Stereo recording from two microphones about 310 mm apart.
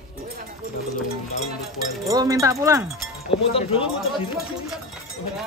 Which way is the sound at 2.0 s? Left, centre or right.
Centre.